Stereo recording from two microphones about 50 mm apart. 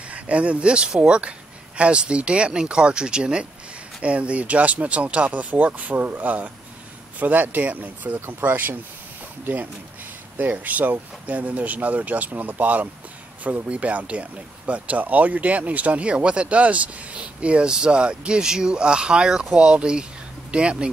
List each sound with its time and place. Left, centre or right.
0.1 s speech: right
10.3 s speech: right